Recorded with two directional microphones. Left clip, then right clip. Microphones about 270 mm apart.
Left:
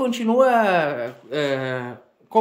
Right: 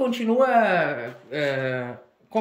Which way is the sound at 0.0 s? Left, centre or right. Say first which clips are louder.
Left 3 dB; centre.